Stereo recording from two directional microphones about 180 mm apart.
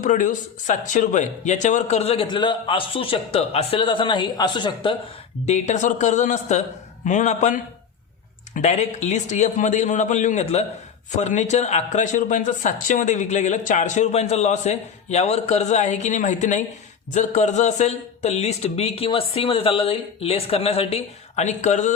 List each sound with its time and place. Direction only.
0.0 s speech: 45° left (ahead or behind); by 4.9 s 25° left (ahead or behind)
5.5 s a man's voice: 40° left (ahead or behind)